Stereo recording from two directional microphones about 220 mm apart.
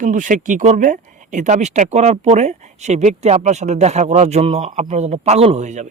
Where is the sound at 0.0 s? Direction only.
35° right (ahead or behind).